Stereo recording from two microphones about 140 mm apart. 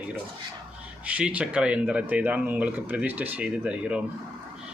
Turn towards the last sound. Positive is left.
turn(degrees=-5)  # may be behind; listen again after turning